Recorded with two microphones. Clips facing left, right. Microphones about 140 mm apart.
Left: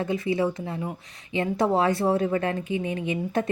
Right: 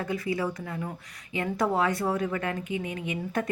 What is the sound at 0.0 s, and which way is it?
Speech, 25° left (ahead or behind).